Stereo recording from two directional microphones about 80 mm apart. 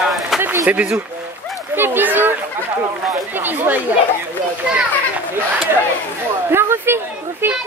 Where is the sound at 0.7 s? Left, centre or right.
Centre.